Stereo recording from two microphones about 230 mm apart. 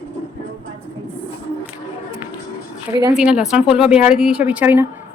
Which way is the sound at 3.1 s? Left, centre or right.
Centre.